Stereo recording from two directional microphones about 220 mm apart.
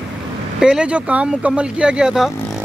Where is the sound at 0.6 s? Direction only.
5° right (ahead or behind).